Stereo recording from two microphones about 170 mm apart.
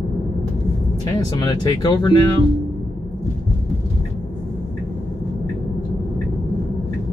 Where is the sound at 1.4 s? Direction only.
20° left (ahead or behind).